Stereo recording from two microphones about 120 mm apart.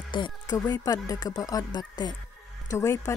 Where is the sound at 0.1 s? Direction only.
40° left (ahead or behind).